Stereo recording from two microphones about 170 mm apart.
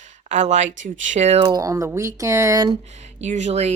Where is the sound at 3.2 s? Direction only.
45° right (ahead or behind).